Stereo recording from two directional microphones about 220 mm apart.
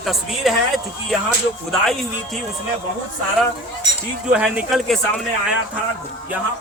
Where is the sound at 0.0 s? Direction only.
Centre (ahead or behind).